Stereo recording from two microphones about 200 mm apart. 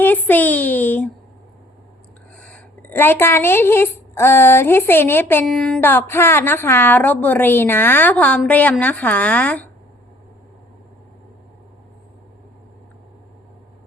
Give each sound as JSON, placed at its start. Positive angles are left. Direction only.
{"t": 0.0, "sound": "a woman's voice", "side_deg": 10}
{"t": 2.4, "sound": "a woman's voice", "side_deg": 10}